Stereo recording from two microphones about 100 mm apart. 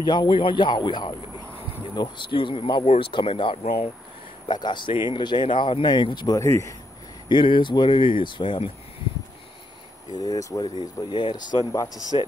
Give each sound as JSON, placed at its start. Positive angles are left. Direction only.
{"t": 0.0, "sound": "speech", "side_deg": 45}
{"t": 4.5, "sound": "speech", "side_deg": 50}
{"t": 7.2, "sound": "speech", "side_deg": 55}
{"t": 10.1, "sound": "speech", "side_deg": 40}
{"t": 10.6, "sound": "speech", "side_deg": 50}